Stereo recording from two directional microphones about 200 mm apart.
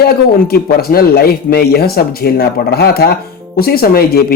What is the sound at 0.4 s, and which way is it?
Speech, 50° left (ahead or behind).